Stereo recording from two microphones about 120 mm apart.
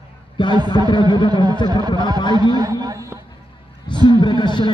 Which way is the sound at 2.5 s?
35° right (ahead or behind).